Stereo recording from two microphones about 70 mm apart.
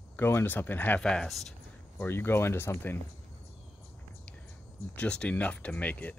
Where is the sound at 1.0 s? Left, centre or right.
Centre.